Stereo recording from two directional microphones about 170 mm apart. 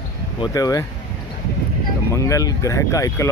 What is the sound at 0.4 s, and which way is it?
Speech, 20° left (ahead or behind).